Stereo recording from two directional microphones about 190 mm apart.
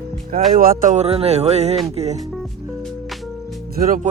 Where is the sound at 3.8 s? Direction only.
45° right (ahead or behind).